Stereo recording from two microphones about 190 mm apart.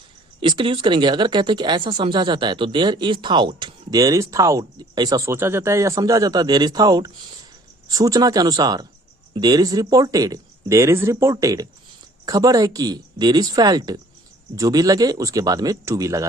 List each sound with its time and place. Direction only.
0.3 s speech: 25° right (ahead or behind)